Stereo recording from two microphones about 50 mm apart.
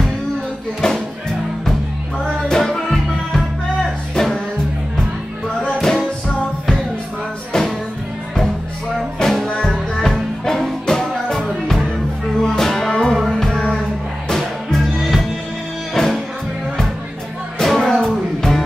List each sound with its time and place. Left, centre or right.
0.7 s music: centre
2.2 s music: centre
5.8 s music: centre
7.5 s music: centre
9.2 s music: centre
14.8 s music: centre
17.6 s music: centre